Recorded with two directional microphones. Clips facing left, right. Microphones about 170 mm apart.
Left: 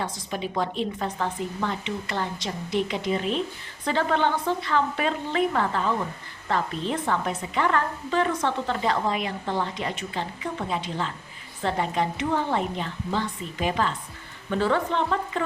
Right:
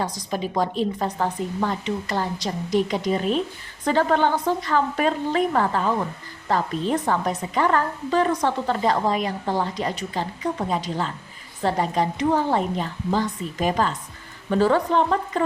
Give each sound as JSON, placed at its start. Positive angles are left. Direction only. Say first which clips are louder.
{"t": 0.0, "sound": "a woman's voice", "louder": "right 4 dB", "side_deg": -40}